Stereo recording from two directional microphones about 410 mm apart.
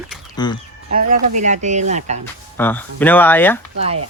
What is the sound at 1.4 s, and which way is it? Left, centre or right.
Speech, centre.